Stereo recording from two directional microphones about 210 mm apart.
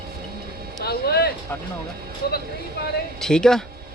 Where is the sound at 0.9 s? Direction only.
50° left (ahead or behind).